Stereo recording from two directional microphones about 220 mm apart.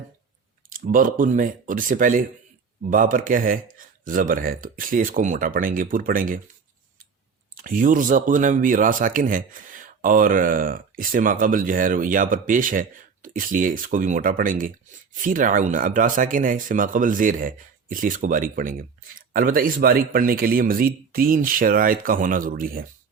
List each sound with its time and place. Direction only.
0.7 s speech: 40° right (ahead or behind)
7.5 s speech: 40° right (ahead or behind)